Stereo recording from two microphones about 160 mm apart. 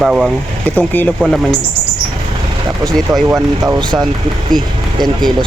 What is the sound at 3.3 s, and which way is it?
Speech, 25° right (ahead or behind).